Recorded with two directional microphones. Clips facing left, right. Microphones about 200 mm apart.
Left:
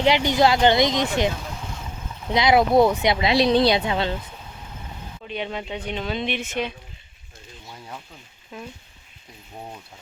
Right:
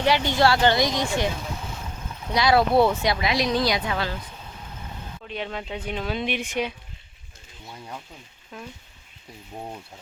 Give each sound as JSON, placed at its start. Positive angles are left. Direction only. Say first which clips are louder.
{"t": 0.0, "sound": "speech", "louder": "left 2 dB", "side_deg": 20}
{"t": 2.3, "sound": "speech", "louder": "left 2 dB", "side_deg": 20}
{"t": 5.3, "sound": "speech", "louder": "left 2 dB", "side_deg": 0}
{"t": 8.5, "sound": "speech", "louder": "left 2 dB", "side_deg": 5}